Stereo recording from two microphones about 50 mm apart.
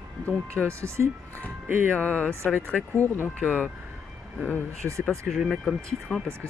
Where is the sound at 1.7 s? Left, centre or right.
Right.